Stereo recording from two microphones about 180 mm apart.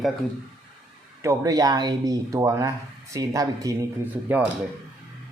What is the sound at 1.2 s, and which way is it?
Speech, 15° right (ahead or behind).